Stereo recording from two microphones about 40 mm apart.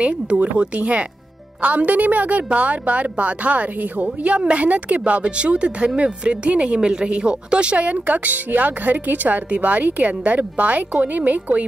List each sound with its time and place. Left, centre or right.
0.0 s speech: right